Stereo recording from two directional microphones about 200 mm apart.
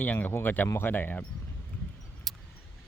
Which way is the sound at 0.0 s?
10° left (ahead or behind).